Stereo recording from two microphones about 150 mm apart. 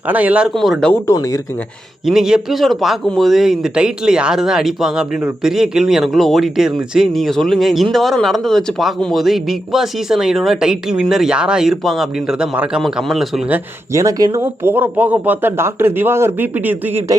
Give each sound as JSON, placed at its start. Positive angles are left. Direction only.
{"t": 0.1, "sound": "speech", "side_deg": -10}
{"t": 1.0, "sound": "speech", "side_deg": 20}
{"t": 2.0, "sound": "speech", "side_deg": -5}
{"t": 13.9, "sound": "speech", "side_deg": -20}